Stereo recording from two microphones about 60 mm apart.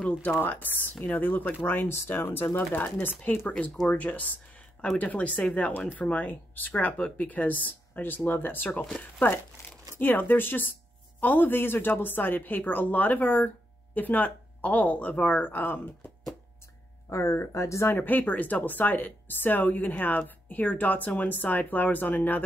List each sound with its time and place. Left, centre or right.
0.2 s speech: left
17.1 s speech: left
17.9 s speech: left